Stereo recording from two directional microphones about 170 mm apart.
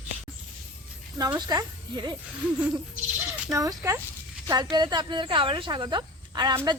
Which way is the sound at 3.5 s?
20° right (ahead or behind).